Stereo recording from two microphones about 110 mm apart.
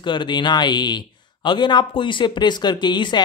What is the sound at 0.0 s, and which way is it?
Speech, 45° left (ahead or behind).